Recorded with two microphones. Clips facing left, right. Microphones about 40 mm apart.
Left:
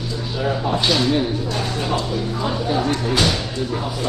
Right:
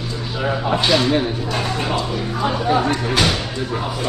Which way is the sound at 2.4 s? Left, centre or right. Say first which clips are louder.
Right 4 dB; right.